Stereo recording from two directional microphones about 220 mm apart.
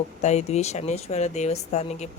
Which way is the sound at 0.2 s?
30° left (ahead or behind).